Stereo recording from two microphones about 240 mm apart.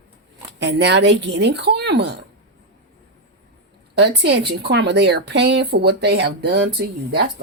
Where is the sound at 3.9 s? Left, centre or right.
Right.